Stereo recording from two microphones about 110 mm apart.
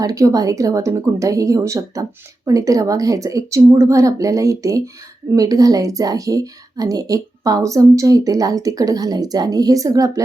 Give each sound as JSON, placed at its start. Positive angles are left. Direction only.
{"t": 0.0, "sound": "a woman's voice", "side_deg": -30}